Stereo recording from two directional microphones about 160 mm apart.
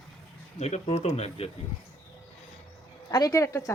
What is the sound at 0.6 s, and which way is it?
Speech, 40° left (ahead or behind).